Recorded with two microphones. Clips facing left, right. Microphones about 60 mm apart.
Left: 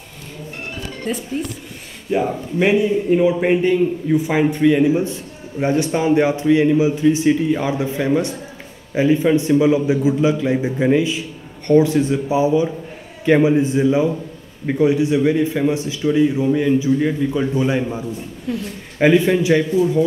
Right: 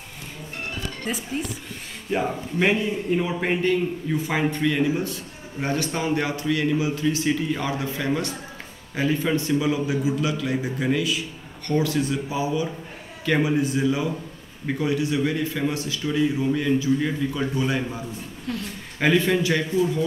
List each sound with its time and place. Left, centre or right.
1.1 s a man's voice: centre; by 20.1 s left